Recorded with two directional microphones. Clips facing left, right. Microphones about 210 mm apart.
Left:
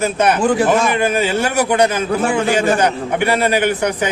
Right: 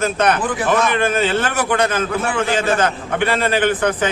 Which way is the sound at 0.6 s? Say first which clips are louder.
Left 2 dB; 10° left (ahead or behind).